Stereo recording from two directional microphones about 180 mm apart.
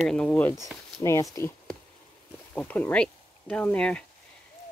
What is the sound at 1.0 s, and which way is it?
Speech, 20° left (ahead or behind).